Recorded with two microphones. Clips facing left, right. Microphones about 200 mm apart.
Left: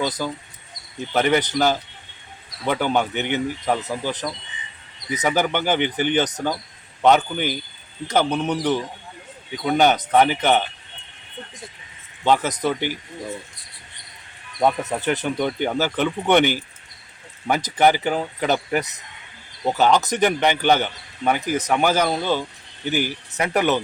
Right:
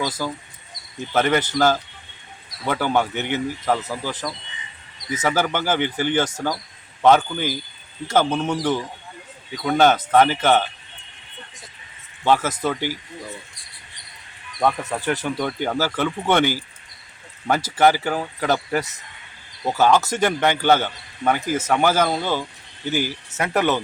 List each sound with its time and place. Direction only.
0.0 s speech: 15° left (ahead or behind)
12.2 s speech: 15° left (ahead or behind)
14.6 s speech: 20° left (ahead or behind)